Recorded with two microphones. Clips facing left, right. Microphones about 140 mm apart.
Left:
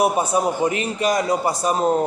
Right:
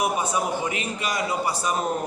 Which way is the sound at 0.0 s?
35° left (ahead or behind).